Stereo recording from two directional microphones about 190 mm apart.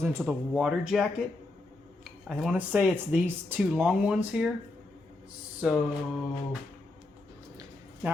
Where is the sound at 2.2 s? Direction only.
5° right (ahead or behind).